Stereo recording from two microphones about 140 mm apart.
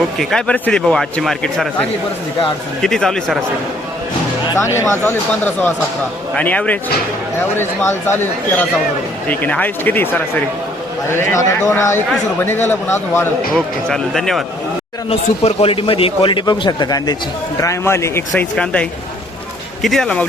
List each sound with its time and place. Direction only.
0.2 s a man's voice: 5° left (ahead or behind)
4.5 s speech: 20° left (ahead or behind)
13.5 s a man's voice: 5° left (ahead or behind)
15.1 s a man's voice: 45° left (ahead or behind); by 18.4 s 20° left (ahead or behind)
18.5 s a man's voice: 10° left (ahead or behind)